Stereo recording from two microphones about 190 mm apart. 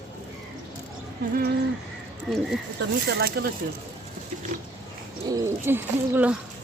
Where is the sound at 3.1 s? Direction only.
55° right (ahead or behind).